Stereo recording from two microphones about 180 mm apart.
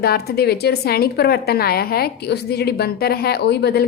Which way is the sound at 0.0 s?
60° left (ahead or behind).